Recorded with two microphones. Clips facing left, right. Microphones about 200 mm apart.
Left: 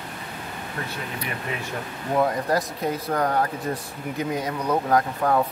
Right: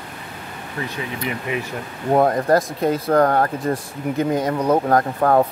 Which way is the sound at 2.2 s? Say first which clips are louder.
Right 6 dB; 50° right (ahead or behind).